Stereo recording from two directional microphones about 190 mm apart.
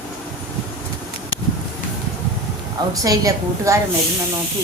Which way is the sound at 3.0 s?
20° right (ahead or behind).